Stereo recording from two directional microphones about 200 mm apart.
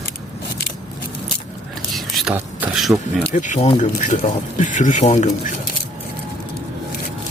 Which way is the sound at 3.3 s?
40° left (ahead or behind).